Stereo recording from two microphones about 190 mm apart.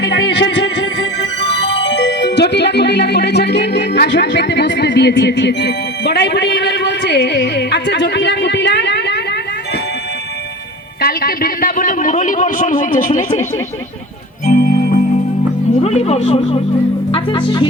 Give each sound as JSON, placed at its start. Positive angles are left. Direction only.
{"t": 0.0, "sound": "music", "side_deg": 65}
{"t": 11.0, "sound": "a man's voice", "side_deg": 50}
{"t": 14.4, "sound": "music", "side_deg": 50}
{"t": 15.8, "sound": "speech", "side_deg": 35}